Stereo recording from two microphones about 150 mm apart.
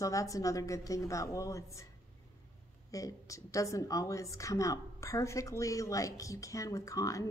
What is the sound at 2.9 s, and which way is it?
A woman's voice, 20° left (ahead or behind).